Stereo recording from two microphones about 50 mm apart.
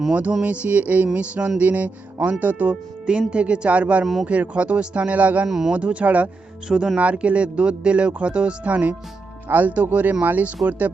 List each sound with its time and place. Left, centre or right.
0.1 s speech: right
0.4 s music: right
3.1 s speech: right
4.0 s speech: centre
4.3 s speech: right
5.5 s speech: centre
5.7 s speech: right
6.7 s speech: centre
9.5 s music: right